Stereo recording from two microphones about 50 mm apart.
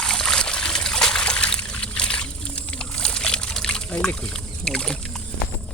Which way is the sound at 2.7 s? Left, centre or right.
Centre.